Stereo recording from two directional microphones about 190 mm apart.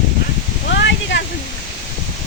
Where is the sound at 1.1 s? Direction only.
75° left (ahead or behind).